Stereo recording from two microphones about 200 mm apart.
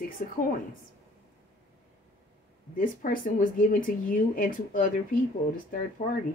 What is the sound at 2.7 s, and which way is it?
Speech, 45° left (ahead or behind).